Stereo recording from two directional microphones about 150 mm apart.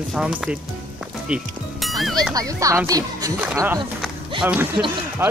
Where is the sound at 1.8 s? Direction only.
Centre (ahead or behind).